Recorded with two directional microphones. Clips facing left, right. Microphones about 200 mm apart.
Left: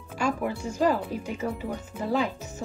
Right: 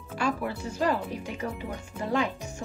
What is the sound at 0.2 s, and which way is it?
Speech, 10° left (ahead or behind).